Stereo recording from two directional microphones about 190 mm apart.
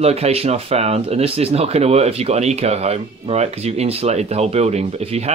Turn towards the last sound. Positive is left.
turn(degrees=-35)  # may be behind; listen again after turning